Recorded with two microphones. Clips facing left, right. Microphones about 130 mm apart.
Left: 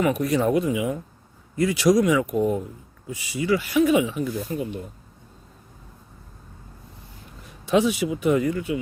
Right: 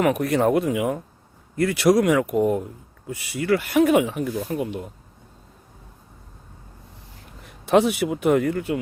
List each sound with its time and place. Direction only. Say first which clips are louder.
0.0 s speech: right 2 dB; 60° right (ahead or behind)
7.6 s speech: right 2 dB; 60° right (ahead or behind)